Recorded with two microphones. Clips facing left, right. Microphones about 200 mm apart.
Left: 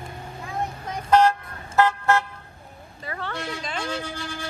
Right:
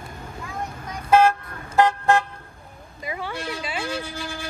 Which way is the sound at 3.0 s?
10° right (ahead or behind).